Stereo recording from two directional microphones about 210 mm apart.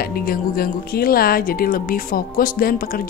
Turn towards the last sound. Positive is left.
turn(degrees=45)  # may be behind; listen again after turning